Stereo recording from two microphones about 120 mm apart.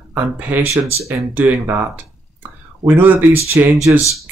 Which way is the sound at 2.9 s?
15° right (ahead or behind).